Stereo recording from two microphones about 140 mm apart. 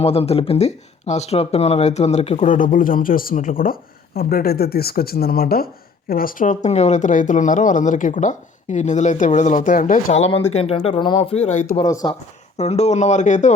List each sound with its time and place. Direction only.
0.0 s speech: 45° left (ahead or behind)
2.5 s speech: 70° left (ahead or behind)
11.9 s speech: 25° left (ahead or behind)
12.5 s speech: 50° left (ahead or behind)